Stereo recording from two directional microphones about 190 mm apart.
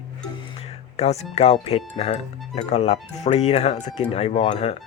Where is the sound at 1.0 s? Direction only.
35° left (ahead or behind).